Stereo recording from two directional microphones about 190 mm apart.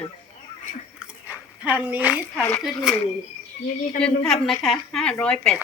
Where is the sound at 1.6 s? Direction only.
10° right (ahead or behind).